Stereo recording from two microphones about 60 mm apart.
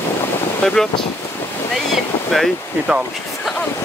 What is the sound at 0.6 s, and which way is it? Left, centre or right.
Speech, centre.